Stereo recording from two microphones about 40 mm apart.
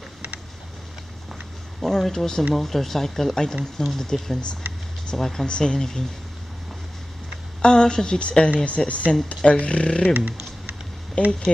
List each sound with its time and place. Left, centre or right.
1.8 s speech: centre
7.6 s speech: centre
10.1 s typing: right
11.2 s speech: left